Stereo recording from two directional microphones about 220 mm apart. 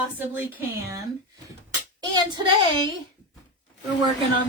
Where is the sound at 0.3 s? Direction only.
10° right (ahead or behind).